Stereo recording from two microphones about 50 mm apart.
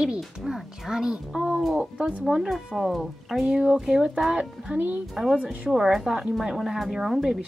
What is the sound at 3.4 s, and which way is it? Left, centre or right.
A woman's voice, centre.